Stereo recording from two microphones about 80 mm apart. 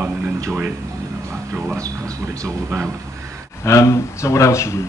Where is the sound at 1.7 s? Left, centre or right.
Right.